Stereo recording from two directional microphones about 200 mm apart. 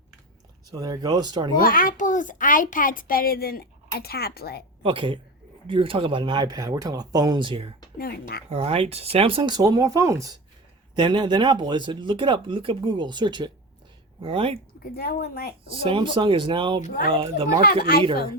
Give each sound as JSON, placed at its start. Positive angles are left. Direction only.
{"t": 0.7, "sound": "speech", "side_deg": -20}
{"t": 1.6, "sound": "a child's voice", "side_deg": 45}
{"t": 4.8, "sound": "speech", "side_deg": -25}
{"t": 7.9, "sound": "a child's voice", "side_deg": 50}
{"t": 8.4, "sound": "speech", "side_deg": -30}
{"t": 14.9, "sound": "a child's voice", "side_deg": 50}
{"t": 15.8, "sound": "speech", "side_deg": -25}